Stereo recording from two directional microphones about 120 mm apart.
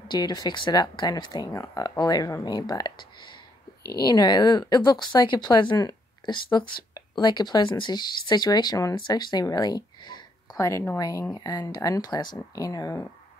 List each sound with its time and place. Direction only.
0.1 s speech: 35° left (ahead or behind)